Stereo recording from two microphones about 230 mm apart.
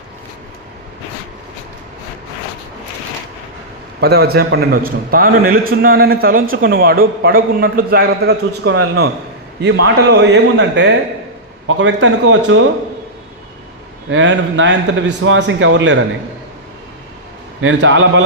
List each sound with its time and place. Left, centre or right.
4.0 s a man's voice: right
14.1 s a man's voice: right
17.6 s a man's voice: right